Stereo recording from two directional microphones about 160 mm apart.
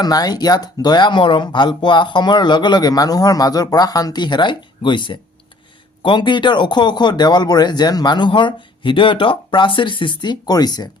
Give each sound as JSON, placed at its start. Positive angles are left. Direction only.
{"t": 0.0, "sound": "speech", "side_deg": 25}